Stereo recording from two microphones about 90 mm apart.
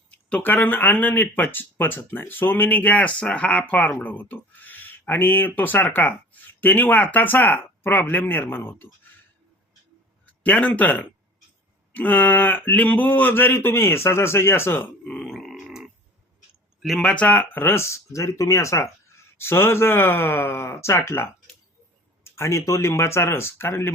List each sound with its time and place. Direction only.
0.1 s speech: 15° left (ahead or behind)
10.2 s speech: 15° left (ahead or behind)
11.9 s speech: 20° left (ahead or behind)
15.0 s grunt: 10° left (ahead or behind)
16.8 s speech: 5° left (ahead or behind); by 23.9 s 25° left (ahead or behind)